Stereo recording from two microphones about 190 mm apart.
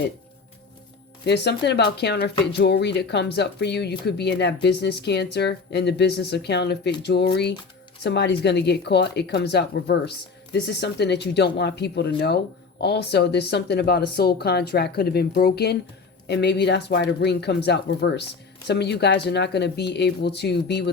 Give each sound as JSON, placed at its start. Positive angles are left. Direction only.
{"t": 1.2, "sound": "speech", "side_deg": 60}